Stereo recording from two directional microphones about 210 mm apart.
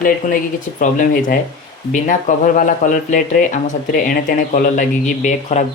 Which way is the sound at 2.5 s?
35° left (ahead or behind).